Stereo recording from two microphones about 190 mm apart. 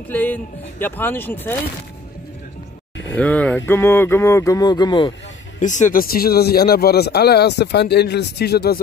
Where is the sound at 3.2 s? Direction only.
5° left (ahead or behind); by 5.1 s 25° left (ahead or behind).